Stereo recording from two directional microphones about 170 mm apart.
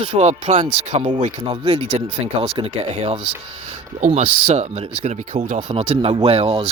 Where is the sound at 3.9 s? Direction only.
45° right (ahead or behind).